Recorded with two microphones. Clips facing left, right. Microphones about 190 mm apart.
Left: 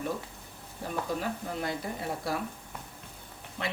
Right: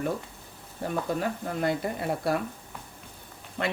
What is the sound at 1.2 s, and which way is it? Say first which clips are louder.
Speech: right 5 dB; 60° right (ahead or behind).